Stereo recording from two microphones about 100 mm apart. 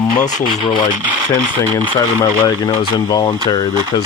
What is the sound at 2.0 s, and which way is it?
Speech, 40° left (ahead or behind).